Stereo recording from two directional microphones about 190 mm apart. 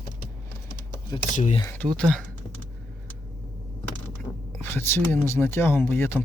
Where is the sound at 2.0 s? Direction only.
5° left (ahead or behind).